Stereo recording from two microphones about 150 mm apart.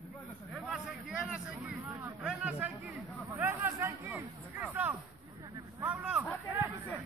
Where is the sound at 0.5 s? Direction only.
Centre (ahead or behind).